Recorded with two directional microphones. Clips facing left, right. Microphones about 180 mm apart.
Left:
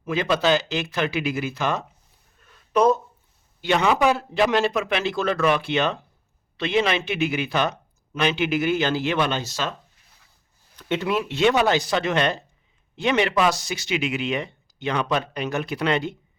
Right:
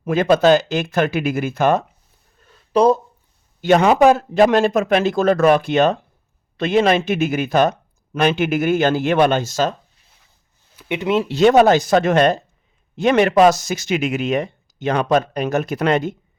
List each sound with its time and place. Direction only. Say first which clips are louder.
0.0 s speech: right 8 dB; 50° right (ahead or behind)
2.4 s a sound: right 4 dB; 35° right (ahead or behind)
3.6 s speech: right 7 dB; 45° right (ahead or behind)
10.8 s speech: right 5 dB; 15° right (ahead or behind); by 16.1 s 45° right (ahead or behind)